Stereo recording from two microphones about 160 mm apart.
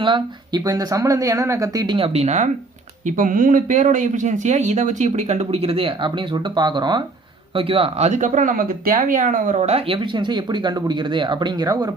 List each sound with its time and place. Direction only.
0.0 s speech: 30° right (ahead or behind)
2.1 s speech: 45° right (ahead or behind)
3.2 s speech: 60° right (ahead or behind); by 11.9 s 25° right (ahead or behind)